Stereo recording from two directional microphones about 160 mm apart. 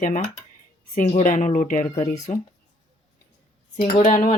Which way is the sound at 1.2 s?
55° left (ahead or behind).